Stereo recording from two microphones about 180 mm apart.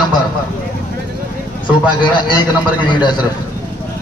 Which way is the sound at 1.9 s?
25° left (ahead or behind).